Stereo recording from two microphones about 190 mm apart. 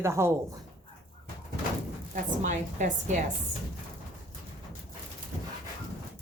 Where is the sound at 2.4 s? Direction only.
40° right (ahead or behind).